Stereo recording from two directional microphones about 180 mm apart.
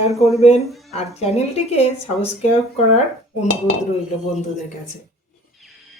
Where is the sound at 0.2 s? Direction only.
35° left (ahead or behind).